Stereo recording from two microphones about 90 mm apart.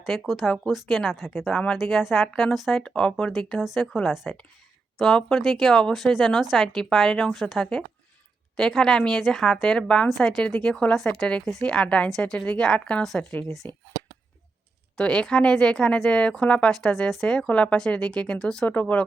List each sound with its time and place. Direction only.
0.0 s speech: centre (ahead or behind)
1.5 s speech: 10° left (ahead or behind)
1.8 s speech: centre (ahead or behind)
3.3 s speech: centre (ahead or behind)
14.9 s speech: 10° left (ahead or behind)